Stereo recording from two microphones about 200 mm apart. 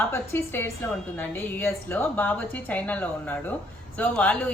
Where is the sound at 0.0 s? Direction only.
10° left (ahead or behind).